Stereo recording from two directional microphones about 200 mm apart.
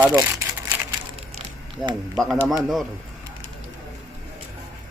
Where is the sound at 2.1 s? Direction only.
Centre (ahead or behind).